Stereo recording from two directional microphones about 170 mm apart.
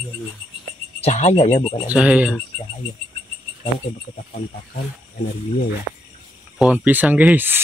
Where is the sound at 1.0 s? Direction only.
40° left (ahead or behind).